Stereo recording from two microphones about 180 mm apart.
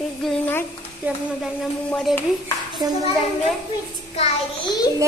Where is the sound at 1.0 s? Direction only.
10° right (ahead or behind).